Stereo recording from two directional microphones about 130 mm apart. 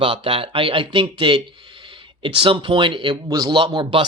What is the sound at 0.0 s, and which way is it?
Speech, 45° right (ahead or behind).